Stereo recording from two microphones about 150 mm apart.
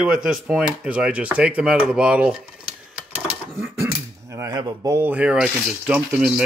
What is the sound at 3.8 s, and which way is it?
Speech, 20° right (ahead or behind).